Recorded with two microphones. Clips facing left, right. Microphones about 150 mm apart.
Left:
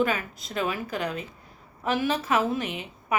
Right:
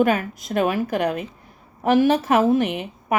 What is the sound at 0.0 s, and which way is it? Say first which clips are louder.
A woman's voice: right 7 dB; 55° right (ahead or behind).